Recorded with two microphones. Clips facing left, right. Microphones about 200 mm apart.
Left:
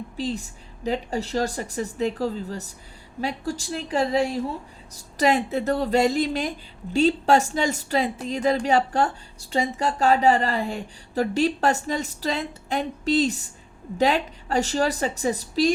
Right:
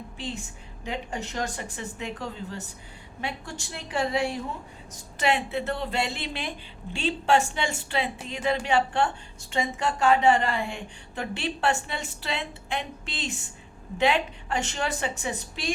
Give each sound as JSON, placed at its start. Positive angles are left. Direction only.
{"t": 0.2, "sound": "a woman's voice", "side_deg": 40}